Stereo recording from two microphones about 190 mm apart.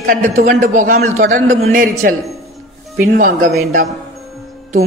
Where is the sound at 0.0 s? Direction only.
45° right (ahead or behind).